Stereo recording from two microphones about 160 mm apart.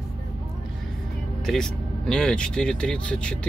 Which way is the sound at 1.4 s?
5° left (ahead or behind).